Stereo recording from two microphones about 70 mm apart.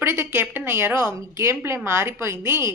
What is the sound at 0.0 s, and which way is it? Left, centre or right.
A woman's voice, right.